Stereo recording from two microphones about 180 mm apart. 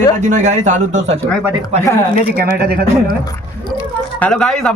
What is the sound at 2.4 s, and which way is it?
Speech, 55° right (ahead or behind).